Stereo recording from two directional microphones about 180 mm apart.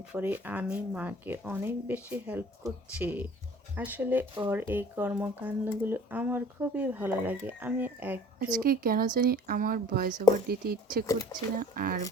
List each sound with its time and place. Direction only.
0.1 s speech: 10° right (ahead or behind)
8.5 s speech: 55° right (ahead or behind)